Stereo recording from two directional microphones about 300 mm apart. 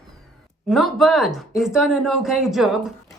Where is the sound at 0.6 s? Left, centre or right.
Centre.